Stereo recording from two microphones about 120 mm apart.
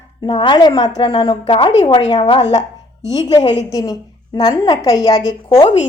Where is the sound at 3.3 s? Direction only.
40° left (ahead or behind).